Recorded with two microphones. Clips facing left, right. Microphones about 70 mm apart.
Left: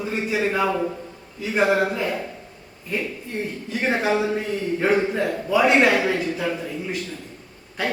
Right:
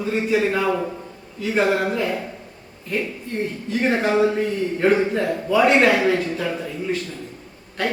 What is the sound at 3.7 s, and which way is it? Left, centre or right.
A man's voice, centre.